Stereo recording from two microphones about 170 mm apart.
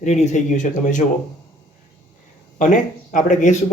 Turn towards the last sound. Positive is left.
turn(degrees=45)  # may be behind; listen again after turning